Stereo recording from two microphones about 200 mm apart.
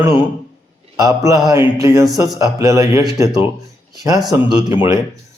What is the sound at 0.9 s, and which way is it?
Speech, 15° right (ahead or behind).